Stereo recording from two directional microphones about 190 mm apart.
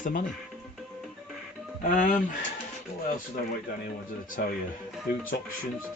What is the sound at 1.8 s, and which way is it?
Speech, 45° left (ahead or behind).